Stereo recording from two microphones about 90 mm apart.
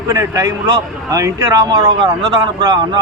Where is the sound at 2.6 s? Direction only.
50° right (ahead or behind).